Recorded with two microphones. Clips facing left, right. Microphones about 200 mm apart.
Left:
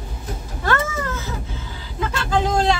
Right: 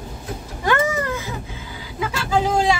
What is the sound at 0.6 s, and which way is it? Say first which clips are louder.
Cat: right 3 dB; 15° right (ahead or behind).